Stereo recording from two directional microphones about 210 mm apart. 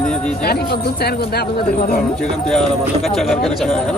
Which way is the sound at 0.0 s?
5° left (ahead or behind).